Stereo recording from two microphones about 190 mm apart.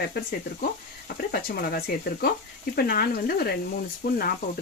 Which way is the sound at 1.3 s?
50° left (ahead or behind).